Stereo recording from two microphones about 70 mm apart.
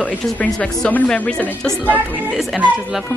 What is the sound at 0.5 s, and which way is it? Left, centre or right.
Speech, centre.